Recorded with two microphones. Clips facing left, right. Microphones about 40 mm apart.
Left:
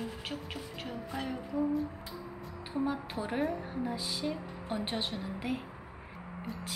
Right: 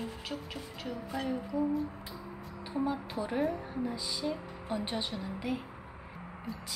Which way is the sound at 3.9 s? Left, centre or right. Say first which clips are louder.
Even; centre.